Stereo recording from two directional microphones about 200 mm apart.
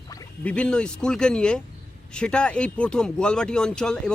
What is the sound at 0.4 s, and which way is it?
Speech, 5° left (ahead or behind).